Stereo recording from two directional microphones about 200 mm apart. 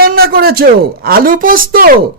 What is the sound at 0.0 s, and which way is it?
Speech, 50° right (ahead or behind).